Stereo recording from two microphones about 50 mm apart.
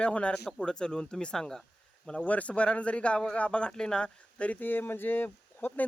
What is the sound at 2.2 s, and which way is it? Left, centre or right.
Speech, left.